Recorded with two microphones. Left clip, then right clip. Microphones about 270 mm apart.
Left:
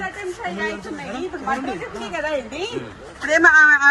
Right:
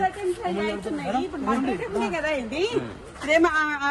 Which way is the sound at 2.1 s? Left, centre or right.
Right.